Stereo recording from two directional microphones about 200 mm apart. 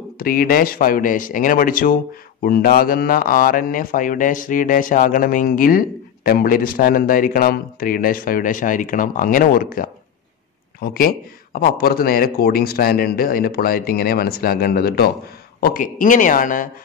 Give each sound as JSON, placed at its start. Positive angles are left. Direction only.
{"t": 0.2, "sound": "a man's voice", "side_deg": 45}